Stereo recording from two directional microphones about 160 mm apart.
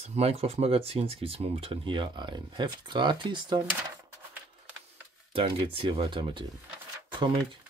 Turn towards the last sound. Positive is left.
turn(degrees=-30)  # may be behind; listen again after turning